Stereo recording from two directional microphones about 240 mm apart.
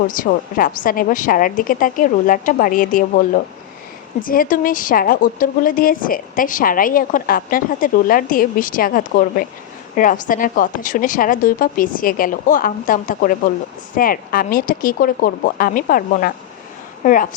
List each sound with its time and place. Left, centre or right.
0.1 s a woman's voice: left